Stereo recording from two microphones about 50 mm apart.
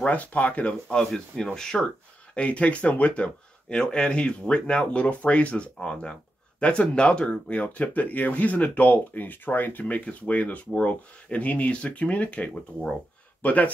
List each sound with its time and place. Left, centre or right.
0.0 s speech: left
1.1 s speech: centre
2.3 s speech: left